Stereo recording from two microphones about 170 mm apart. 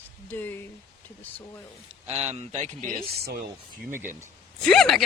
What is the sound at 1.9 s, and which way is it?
Speech, 40° right (ahead or behind).